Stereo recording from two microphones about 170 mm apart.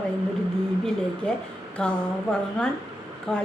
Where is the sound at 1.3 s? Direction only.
5° left (ahead or behind).